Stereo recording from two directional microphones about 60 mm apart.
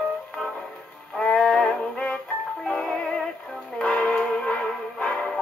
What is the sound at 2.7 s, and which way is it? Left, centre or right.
Music, centre.